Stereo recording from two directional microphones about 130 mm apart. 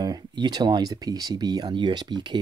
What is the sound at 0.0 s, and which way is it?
Speech, 30° right (ahead or behind).